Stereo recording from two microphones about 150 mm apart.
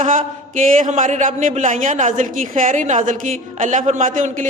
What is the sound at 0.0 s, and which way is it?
A man's voice, 60° right (ahead or behind).